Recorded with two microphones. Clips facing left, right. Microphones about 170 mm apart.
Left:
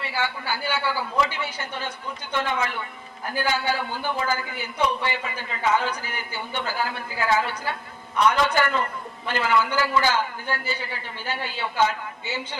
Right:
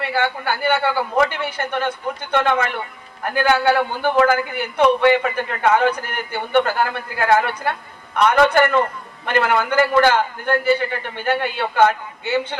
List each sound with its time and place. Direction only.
0.0 s a man's voice: 60° right (ahead or behind)